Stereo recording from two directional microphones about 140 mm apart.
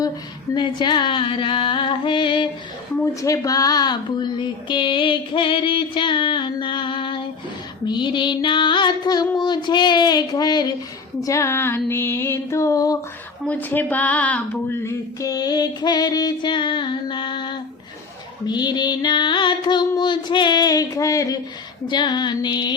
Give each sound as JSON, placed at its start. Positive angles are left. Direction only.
{"t": 0.5, "sound": "a woman's voice", "side_deg": 35}
{"t": 3.0, "sound": "a woman's voice", "side_deg": 25}
{"t": 11.2, "sound": "a sound", "side_deg": 20}
{"t": 13.4, "sound": "speech", "side_deg": 10}
{"t": 15.2, "sound": "a woman's voice", "side_deg": 25}